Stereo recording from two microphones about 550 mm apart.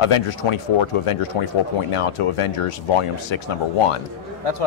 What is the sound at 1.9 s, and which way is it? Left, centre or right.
A man's voice, left.